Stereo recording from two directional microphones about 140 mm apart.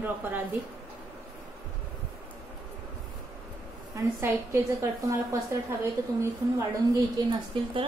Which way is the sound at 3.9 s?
20° right (ahead or behind).